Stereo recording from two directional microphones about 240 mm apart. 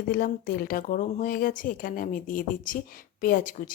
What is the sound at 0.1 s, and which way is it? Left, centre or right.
A woman's voice, left.